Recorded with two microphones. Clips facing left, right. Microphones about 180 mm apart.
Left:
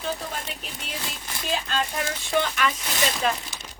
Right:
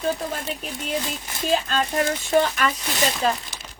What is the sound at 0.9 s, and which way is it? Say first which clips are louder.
A woman's voice: right 9 dB; 45° right (ahead or behind).